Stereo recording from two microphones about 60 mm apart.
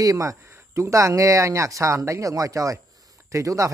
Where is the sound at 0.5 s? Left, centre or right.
Right.